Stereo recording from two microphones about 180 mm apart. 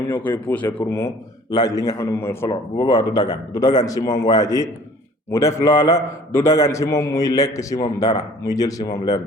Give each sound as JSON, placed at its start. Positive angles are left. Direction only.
{"t": 0.3, "sound": "a man's voice", "side_deg": 10}